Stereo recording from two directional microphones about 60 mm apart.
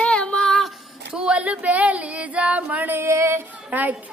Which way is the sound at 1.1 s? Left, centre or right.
Centre.